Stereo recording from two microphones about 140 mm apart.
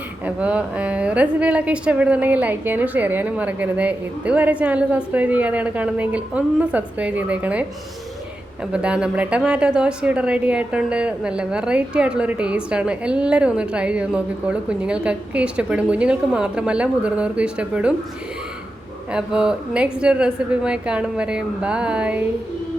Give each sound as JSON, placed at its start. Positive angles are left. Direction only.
{"t": 0.3, "sound": "speech", "side_deg": -10}
{"t": 8.7, "sound": "speech", "side_deg": -5}
{"t": 19.1, "sound": "speech", "side_deg": -5}